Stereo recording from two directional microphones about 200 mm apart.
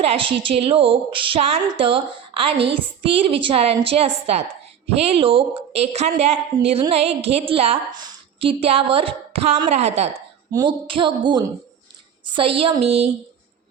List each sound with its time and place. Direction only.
0.0 s a woman's voice: 30° right (ahead or behind)
10.5 s a woman's voice: 20° right (ahead or behind)